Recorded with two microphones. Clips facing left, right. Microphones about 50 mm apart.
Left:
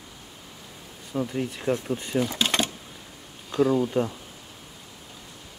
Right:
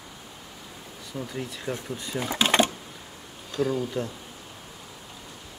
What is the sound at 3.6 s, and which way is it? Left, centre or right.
Speech, centre.